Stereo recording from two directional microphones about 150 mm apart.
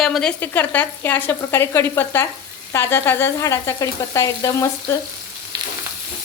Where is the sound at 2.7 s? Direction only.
15° left (ahead or behind).